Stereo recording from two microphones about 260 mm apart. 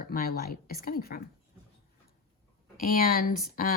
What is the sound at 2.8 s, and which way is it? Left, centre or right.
Speech, left.